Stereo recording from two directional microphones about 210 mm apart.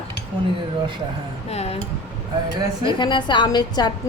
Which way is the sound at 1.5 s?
30° left (ahead or behind).